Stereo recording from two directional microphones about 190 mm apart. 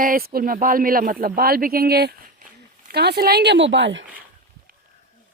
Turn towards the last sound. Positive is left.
turn(degrees=-70)  # may be behind; listen again after turning